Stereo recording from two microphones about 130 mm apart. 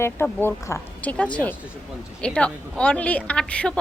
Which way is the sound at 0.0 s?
20° left (ahead or behind).